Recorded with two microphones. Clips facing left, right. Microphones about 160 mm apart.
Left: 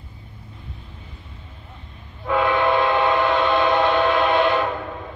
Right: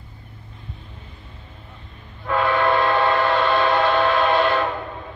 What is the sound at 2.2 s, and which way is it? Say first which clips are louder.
Train: even; 15° left (ahead or behind).